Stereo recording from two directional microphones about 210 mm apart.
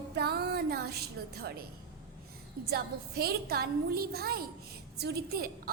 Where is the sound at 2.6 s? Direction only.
45° right (ahead or behind).